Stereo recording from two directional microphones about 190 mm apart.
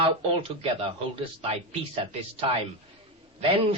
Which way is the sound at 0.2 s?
30° right (ahead or behind).